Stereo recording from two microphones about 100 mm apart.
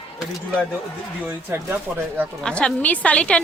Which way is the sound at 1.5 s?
25° right (ahead or behind).